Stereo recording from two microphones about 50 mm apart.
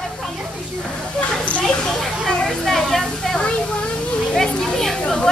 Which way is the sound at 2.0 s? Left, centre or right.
Centre.